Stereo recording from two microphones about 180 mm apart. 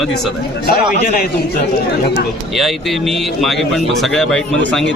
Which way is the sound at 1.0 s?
55° left (ahead or behind).